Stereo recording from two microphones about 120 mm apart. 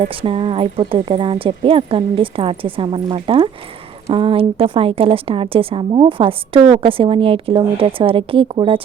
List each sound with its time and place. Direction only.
0.0 s a woman's voice: 45° right (ahead or behind)